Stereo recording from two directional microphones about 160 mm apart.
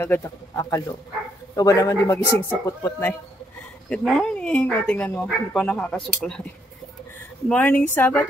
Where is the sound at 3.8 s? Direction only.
5° left (ahead or behind).